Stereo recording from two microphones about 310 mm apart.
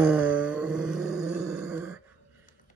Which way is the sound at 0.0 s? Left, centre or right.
Centre.